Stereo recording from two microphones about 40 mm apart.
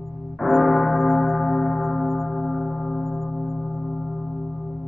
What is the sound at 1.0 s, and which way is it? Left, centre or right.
Church bell, centre.